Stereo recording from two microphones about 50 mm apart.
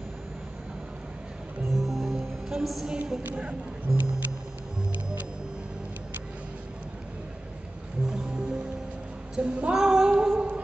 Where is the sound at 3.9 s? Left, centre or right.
Centre.